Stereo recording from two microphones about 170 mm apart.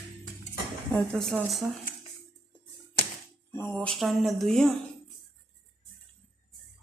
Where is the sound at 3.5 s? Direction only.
10° left (ahead or behind).